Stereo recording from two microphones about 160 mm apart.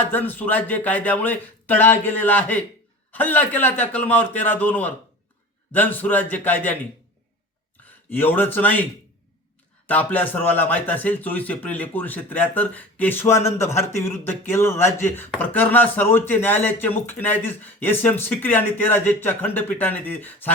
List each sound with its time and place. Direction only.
0.0 s a man's voice: 10° left (ahead or behind)
7.9 s a man's voice: 10° left (ahead or behind)